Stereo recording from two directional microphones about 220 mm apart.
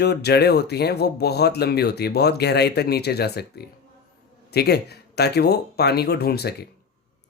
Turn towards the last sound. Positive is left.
turn(degrees=45)  # may be behind; listen again after turning